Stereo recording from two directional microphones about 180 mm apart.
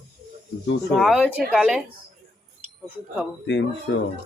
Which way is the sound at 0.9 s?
Centre (ahead or behind).